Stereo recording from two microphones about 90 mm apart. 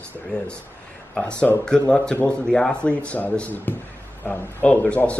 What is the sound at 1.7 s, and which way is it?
A man's voice, 10° left (ahead or behind).